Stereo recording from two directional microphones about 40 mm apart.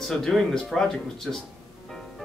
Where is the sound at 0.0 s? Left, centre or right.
Centre.